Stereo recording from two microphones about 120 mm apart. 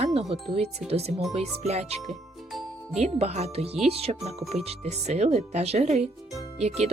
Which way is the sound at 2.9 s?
65° right (ahead or behind).